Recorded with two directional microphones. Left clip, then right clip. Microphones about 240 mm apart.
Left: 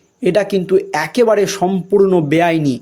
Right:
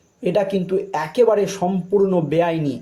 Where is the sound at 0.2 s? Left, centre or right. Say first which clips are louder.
Left 5 dB; left.